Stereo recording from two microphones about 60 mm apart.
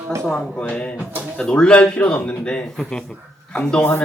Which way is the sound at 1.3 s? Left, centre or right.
Centre.